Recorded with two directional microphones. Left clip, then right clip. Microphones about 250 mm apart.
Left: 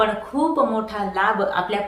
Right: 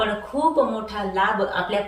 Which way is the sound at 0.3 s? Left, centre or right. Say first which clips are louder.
Right 2 dB; centre.